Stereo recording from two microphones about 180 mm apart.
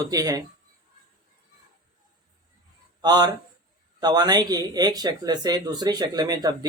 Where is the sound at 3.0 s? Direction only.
25° right (ahead or behind).